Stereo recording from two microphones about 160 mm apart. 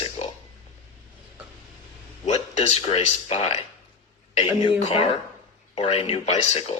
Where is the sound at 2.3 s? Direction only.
45° left (ahead or behind).